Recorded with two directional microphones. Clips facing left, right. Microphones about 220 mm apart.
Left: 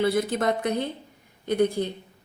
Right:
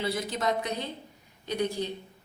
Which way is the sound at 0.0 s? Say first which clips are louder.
Left 7 dB; 55° left (ahead or behind).